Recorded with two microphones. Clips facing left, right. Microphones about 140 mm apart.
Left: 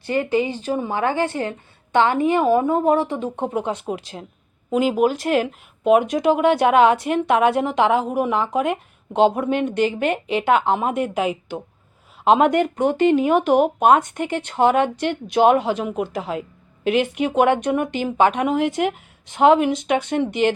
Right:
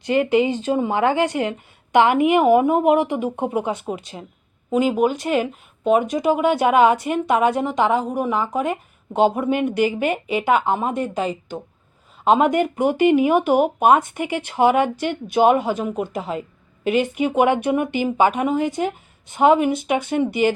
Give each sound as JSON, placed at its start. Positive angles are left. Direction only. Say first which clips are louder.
{"t": 0.0, "sound": "speech", "louder": "right 3 dB", "side_deg": -15}